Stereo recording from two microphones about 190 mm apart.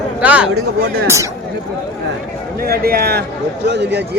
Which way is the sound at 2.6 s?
55° right (ahead or behind).